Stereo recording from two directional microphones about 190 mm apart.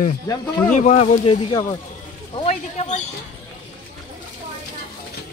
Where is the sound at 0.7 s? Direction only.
35° left (ahead or behind).